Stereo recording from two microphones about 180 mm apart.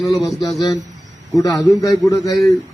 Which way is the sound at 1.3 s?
20° left (ahead or behind).